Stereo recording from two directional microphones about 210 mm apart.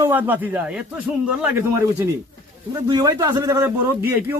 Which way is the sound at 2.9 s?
20° right (ahead or behind).